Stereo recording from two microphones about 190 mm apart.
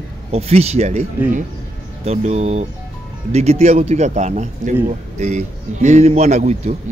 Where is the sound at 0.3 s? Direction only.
35° right (ahead or behind).